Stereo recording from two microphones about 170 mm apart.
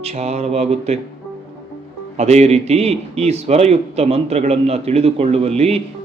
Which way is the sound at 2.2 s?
40° right (ahead or behind).